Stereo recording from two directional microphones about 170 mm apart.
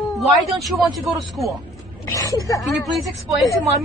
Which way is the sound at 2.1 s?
20° left (ahead or behind).